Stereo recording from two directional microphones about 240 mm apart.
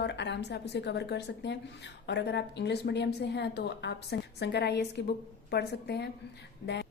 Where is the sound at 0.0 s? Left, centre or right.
Left.